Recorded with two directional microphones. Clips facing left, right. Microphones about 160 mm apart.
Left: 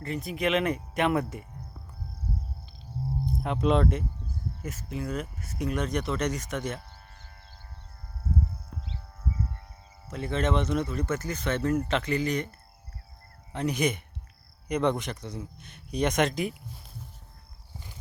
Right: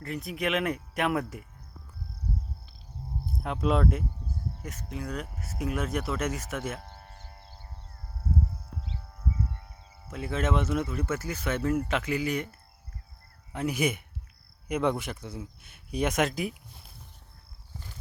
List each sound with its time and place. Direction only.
0.0 s speech: centre (ahead or behind)
3.2 s speech: centre (ahead or behind)
7.0 s a sound: 35° right (ahead or behind)
10.1 s speech: 5° right (ahead or behind)